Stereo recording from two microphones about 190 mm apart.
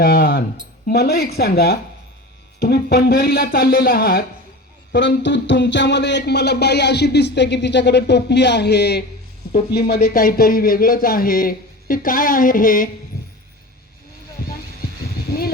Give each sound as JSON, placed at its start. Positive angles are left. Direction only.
{"t": 0.0, "sound": "music", "side_deg": 55}
{"t": 2.6, "sound": "speech", "side_deg": 55}
{"t": 4.9, "sound": "music", "side_deg": 70}
{"t": 9.5, "sound": "speech", "side_deg": 55}
{"t": 14.4, "sound": "a sound", "side_deg": 55}